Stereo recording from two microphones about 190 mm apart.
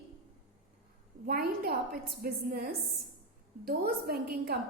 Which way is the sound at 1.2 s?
55° right (ahead or behind).